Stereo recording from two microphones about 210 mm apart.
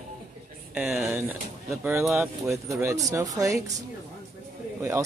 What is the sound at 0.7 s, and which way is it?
Speech, 5° right (ahead or behind).